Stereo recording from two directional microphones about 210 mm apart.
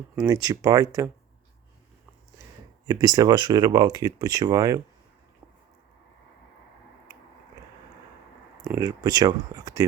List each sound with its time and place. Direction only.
0.3 s speech: 15° right (ahead or behind)
2.8 s speech: 20° right (ahead or behind)
8.6 s speech: 15° right (ahead or behind)